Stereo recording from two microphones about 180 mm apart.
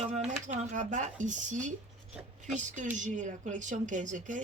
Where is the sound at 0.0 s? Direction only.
35° right (ahead or behind).